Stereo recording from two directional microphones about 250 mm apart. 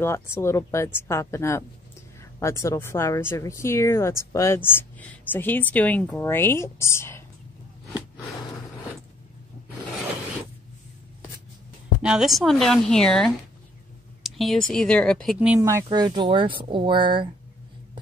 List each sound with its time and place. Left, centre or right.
0.0 s a woman's voice: centre
12.0 s speech: centre
14.2 s a sound: centre
14.7 s speech: centre